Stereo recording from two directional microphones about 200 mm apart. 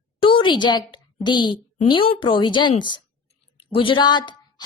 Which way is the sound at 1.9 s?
25° left (ahead or behind).